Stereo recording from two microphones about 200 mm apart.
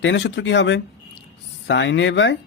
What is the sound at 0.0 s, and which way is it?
Speech, 60° left (ahead or behind).